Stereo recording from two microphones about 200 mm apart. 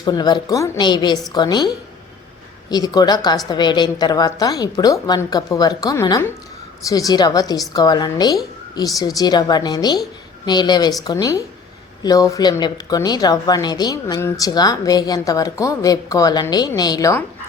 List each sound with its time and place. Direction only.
0.0 s a woman's voice: 20° left (ahead or behind)